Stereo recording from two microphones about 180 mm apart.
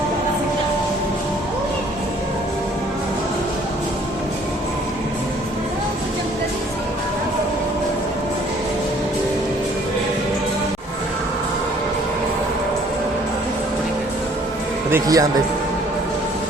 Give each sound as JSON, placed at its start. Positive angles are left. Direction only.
{"t": 14.8, "sound": "speech", "side_deg": -15}